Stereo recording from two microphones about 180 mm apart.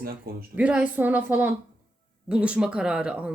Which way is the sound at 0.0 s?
55° right (ahead or behind).